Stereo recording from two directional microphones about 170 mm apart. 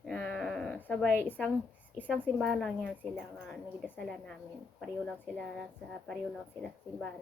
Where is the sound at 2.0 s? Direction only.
5° right (ahead or behind).